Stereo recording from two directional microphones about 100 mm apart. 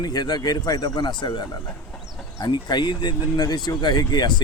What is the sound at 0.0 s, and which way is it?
Speech, 40° left (ahead or behind).